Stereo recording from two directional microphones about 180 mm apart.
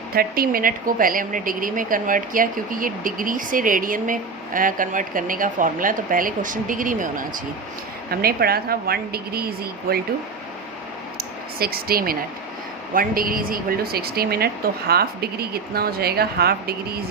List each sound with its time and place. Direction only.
0.1 s a woman's voice: 55° right (ahead or behind)
11.2 s a sound: 55° right (ahead or behind)
12.9 s a woman's voice: 55° right (ahead or behind)